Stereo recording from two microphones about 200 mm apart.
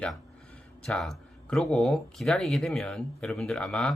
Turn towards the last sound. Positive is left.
turn(degrees=5)  # may be behind; listen again after turning